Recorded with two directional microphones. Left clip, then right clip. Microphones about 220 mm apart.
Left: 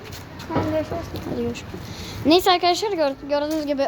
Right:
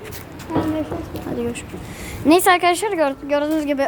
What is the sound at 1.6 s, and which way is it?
A woman's voice, 10° right (ahead or behind).